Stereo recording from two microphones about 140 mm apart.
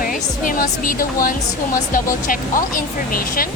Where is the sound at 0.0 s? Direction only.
75° left (ahead or behind).